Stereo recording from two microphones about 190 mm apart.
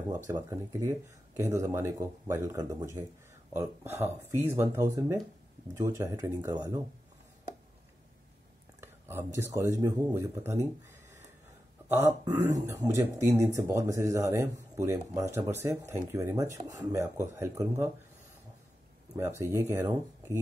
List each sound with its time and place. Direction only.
0.3 s speech: 15° right (ahead or behind)
8.8 s speech: 10° right (ahead or behind)
12.4 s speech: 15° right (ahead or behind)
19.1 s speech: 15° right (ahead or behind)